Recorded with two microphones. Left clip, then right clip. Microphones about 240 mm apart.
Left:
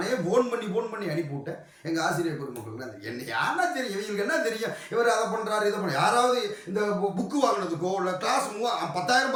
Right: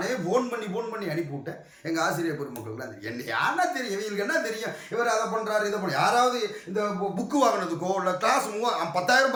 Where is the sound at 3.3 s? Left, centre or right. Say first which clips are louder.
Right 1 dB; centre.